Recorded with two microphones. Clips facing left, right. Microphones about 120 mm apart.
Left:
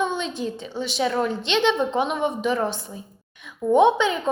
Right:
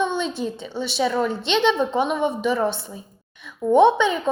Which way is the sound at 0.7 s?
5° right (ahead or behind).